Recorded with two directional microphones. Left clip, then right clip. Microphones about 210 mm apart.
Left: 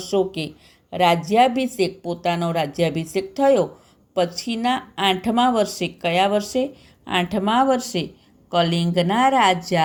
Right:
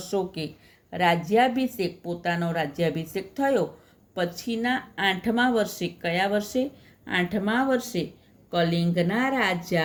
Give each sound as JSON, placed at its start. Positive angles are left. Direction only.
{"t": 0.0, "sound": "speech", "side_deg": 30}
{"t": 0.3, "sound": "speech", "side_deg": 0}
{"t": 1.3, "sound": "speech", "side_deg": 30}